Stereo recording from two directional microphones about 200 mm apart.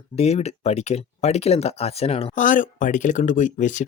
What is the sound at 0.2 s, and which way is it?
Speech, 30° left (ahead or behind).